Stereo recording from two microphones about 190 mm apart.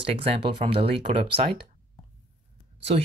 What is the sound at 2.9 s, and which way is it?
Speech, 35° right (ahead or behind).